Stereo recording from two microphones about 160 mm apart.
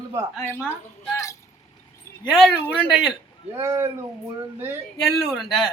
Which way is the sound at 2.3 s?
5° left (ahead or behind).